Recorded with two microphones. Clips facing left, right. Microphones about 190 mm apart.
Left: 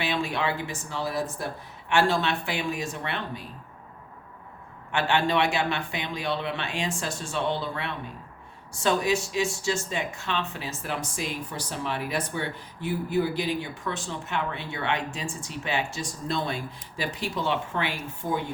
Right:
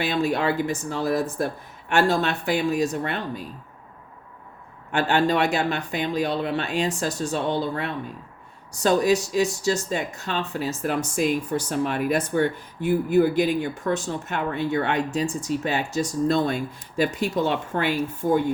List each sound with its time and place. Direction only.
0.0 s a man's voice: 40° right (ahead or behind)
4.9 s a man's voice: 40° right (ahead or behind)